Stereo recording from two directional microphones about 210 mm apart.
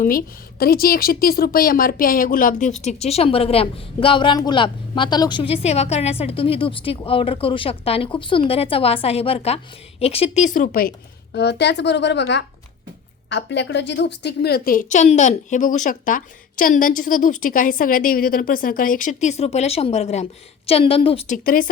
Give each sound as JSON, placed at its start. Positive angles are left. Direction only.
{"t": 0.0, "sound": "a woman's voice", "side_deg": 45}